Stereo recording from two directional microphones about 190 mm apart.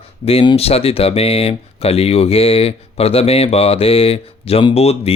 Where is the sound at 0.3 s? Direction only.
30° left (ahead or behind).